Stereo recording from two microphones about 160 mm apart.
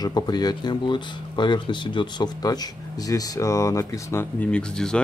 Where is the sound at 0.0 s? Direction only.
25° left (ahead or behind).